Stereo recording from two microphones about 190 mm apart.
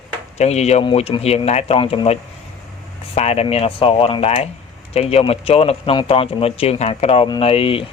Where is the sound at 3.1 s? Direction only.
35° left (ahead or behind).